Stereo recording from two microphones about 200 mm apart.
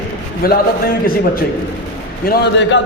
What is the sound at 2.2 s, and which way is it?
Speech, 50° left (ahead or behind).